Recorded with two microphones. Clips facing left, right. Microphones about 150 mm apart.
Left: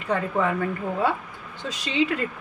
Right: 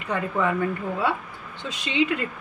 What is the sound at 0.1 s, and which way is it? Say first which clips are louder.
Speech: left 1 dB; 30° left (ahead or behind).